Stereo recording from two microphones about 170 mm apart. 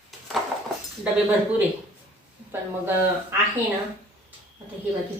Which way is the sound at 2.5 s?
15° right (ahead or behind).